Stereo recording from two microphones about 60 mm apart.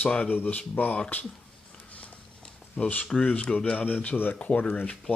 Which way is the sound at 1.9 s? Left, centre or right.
Left.